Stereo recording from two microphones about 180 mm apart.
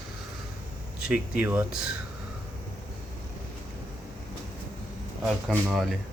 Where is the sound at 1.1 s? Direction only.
10° right (ahead or behind).